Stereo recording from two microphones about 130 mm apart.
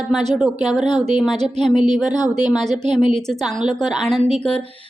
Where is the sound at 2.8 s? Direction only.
65° right (ahead or behind).